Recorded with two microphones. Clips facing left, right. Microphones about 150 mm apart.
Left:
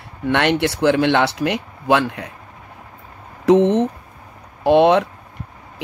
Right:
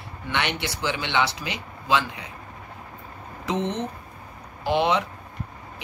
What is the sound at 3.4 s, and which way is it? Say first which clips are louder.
Speech: left 13 dB; 90° left.